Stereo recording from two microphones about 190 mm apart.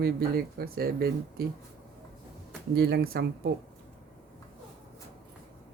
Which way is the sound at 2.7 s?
55° right (ahead or behind).